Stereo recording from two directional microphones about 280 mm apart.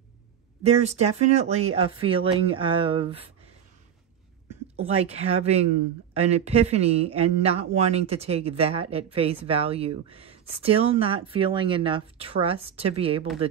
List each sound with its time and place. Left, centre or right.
0.7 s speech: right
4.8 s speech: right